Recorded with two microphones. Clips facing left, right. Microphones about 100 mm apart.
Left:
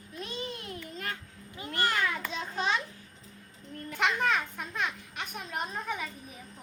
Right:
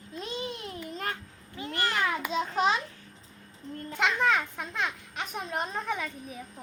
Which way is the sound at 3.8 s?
30° right (ahead or behind).